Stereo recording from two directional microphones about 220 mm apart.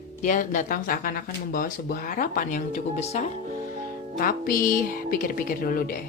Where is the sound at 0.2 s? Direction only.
35° left (ahead or behind).